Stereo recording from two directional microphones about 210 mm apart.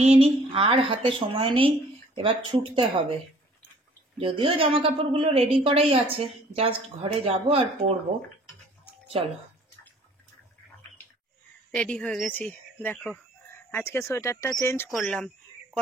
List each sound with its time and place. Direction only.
0.0 s a woman's voice: 30° right (ahead or behind)
4.2 s a woman's voice: 25° right (ahead or behind)
9.2 s a woman's voice: 25° right (ahead or behind)
11.7 s a woman's voice: 5° left (ahead or behind)
14.9 s a sound: centre (ahead or behind)